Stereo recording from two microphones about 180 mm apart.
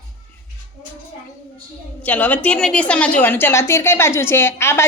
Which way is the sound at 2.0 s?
10° left (ahead or behind).